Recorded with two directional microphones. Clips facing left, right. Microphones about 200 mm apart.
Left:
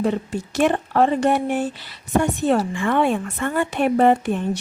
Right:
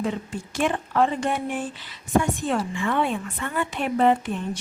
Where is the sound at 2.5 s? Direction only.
45° left (ahead or behind).